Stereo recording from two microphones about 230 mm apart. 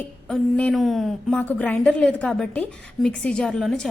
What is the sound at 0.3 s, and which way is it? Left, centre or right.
A woman's voice, centre.